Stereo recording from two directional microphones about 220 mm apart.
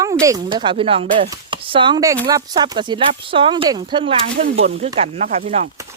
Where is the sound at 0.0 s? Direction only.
15° right (ahead or behind).